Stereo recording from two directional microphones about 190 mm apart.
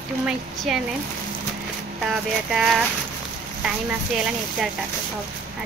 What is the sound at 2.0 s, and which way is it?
Speech, centre (ahead or behind).